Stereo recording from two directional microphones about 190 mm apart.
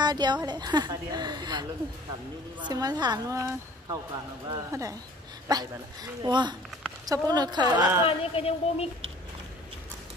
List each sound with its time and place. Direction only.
0.0 s a woman's voice: 20° right (ahead or behind)
8.0 s speech: 30° left (ahead or behind)